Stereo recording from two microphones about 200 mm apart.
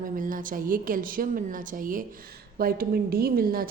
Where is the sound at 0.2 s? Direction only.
40° right (ahead or behind).